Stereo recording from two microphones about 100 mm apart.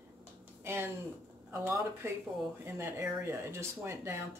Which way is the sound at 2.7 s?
25° right (ahead or behind).